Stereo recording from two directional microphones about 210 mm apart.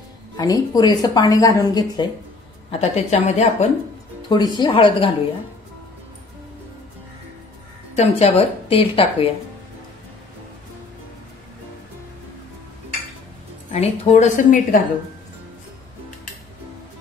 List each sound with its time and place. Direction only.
0.4 s a woman's voice: 20° left (ahead or behind)
2.7 s a woman's voice: 30° left (ahead or behind)
4.3 s a woman's voice: 20° left (ahead or behind)
7.9 s a woman's voice: 30° left (ahead or behind)
13.7 s a woman's voice: 30° left (ahead or behind)